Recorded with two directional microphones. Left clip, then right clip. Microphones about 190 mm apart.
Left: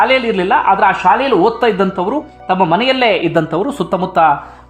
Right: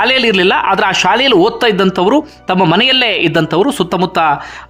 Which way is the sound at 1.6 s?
15° right (ahead or behind).